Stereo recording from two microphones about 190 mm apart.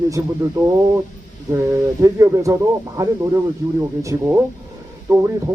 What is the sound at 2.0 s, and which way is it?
Speech, 15° right (ahead or behind).